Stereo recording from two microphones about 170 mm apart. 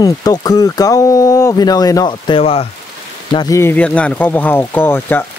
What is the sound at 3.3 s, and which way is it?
Speech, 20° left (ahead or behind).